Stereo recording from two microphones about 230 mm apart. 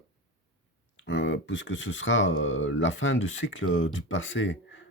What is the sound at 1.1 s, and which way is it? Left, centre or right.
Speech, left.